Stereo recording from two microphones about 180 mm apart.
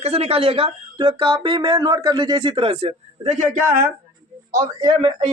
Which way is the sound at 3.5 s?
10° right (ahead or behind).